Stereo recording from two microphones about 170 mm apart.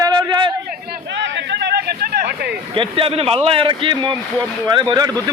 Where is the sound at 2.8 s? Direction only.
30° right (ahead or behind).